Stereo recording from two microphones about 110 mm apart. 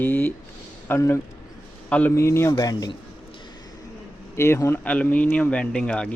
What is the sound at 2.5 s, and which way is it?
Speech, 35° left (ahead or behind).